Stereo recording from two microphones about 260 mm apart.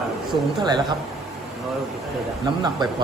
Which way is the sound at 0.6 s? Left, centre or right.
Centre.